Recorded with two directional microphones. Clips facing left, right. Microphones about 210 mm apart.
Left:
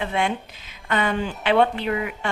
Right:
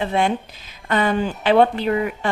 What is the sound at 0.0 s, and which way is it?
A woman's voice, 35° right (ahead or behind).